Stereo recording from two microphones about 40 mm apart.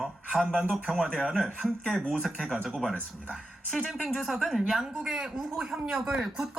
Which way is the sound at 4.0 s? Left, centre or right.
Centre.